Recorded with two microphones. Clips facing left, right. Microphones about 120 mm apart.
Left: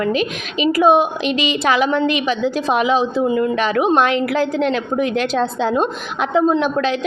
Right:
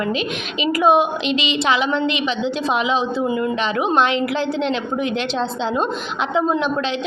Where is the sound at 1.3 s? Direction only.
45° left (ahead or behind).